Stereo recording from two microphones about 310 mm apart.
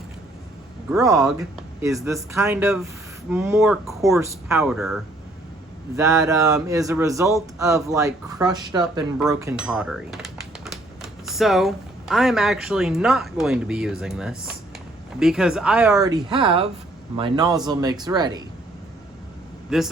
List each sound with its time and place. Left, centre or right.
0.9 s speech: centre
19.7 s speech: centre